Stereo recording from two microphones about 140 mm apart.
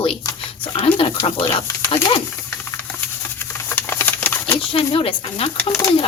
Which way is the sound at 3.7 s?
15° left (ahead or behind).